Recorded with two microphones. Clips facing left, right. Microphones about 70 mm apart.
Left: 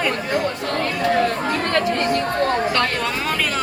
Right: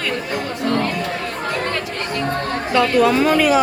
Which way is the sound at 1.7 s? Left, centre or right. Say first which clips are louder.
Left 5 dB; left.